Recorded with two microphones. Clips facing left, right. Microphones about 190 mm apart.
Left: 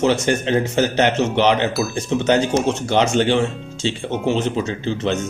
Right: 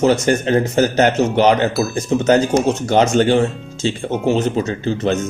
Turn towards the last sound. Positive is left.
turn(degrees=-45)  # may be behind; listen again after turning